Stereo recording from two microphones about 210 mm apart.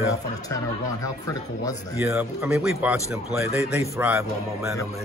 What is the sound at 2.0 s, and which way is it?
Speech, 10° right (ahead or behind).